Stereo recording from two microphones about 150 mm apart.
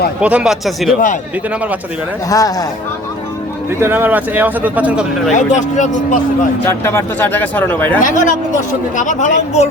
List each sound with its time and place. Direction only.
0.2 s speech: 10° right (ahead or behind)
2.3 s speech: 25° left (ahead or behind)
3.8 s speech: 15° right (ahead or behind)
5.3 s speech: 55° left (ahead or behind)
6.7 s speech: 15° left (ahead or behind)
8.0 s speech: 60° left (ahead or behind)